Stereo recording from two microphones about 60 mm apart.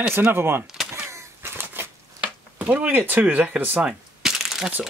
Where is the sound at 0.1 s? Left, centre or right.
Right.